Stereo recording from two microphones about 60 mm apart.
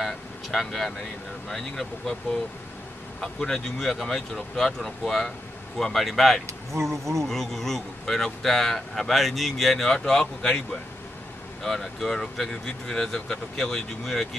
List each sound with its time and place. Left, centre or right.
0.0 s speech: centre
3.2 s speech: centre
6.4 s speech: right
7.2 s speech: centre